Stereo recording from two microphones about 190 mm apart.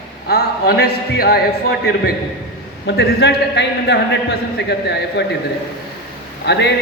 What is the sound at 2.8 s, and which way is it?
A man's voice, 65° left (ahead or behind).